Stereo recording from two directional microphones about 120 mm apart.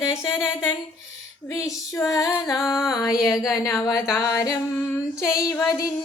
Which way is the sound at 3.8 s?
30° left (ahead or behind).